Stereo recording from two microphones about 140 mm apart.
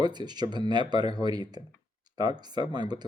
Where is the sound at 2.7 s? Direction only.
30° right (ahead or behind).